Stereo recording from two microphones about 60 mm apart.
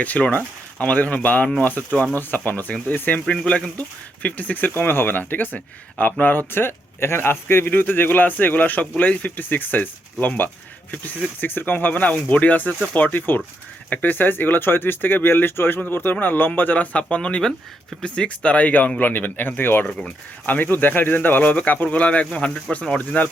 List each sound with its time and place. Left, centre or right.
0.0 s speech: left